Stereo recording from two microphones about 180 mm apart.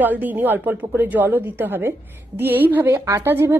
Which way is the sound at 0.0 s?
10° right (ahead or behind).